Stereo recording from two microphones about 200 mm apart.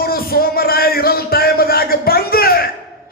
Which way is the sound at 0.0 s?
50° left (ahead or behind).